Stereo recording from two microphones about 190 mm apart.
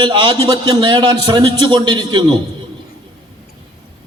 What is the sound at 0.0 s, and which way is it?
A man's voice, 25° right (ahead or behind).